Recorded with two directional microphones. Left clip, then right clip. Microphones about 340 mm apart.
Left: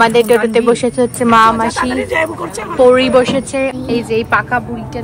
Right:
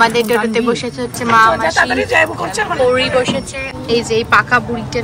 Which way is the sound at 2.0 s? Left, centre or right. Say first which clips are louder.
Right 3 dB; right.